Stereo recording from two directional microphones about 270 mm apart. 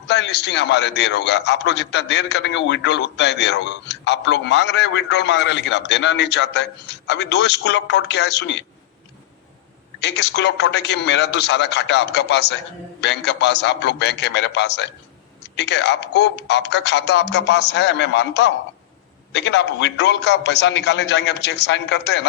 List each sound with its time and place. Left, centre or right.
0.1 s a man's voice: left
10.0 s a man's voice: left